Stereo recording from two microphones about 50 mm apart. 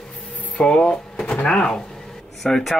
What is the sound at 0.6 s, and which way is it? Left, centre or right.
Speech, centre.